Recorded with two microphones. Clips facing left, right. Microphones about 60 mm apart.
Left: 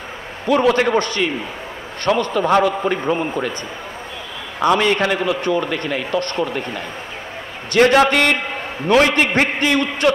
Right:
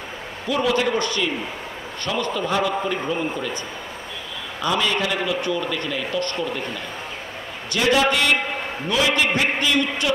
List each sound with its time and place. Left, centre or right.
0.5 s a man's voice: left
4.6 s a man's voice: left